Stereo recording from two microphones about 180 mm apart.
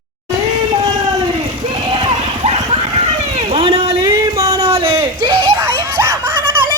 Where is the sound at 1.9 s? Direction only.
30° right (ahead or behind).